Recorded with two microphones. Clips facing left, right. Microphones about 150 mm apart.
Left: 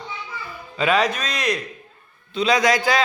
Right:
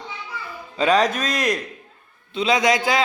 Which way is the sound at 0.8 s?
40° right (ahead or behind).